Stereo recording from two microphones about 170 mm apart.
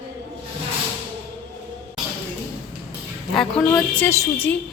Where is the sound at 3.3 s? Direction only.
5° left (ahead or behind).